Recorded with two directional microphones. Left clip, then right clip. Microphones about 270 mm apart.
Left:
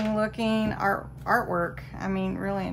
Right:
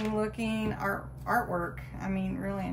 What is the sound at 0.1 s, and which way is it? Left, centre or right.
Speech, left.